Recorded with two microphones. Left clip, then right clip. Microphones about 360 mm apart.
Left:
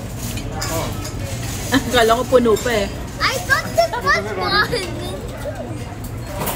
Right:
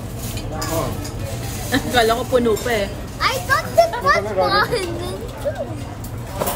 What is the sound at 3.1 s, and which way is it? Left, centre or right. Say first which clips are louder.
Children playing: even; centre.